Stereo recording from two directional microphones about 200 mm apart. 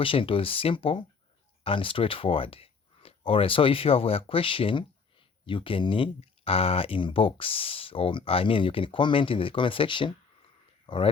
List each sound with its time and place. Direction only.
0.0 s speech: 25° left (ahead or behind)